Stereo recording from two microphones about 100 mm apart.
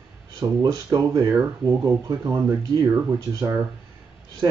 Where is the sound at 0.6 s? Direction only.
40° right (ahead or behind); by 2.5 s 25° right (ahead or behind).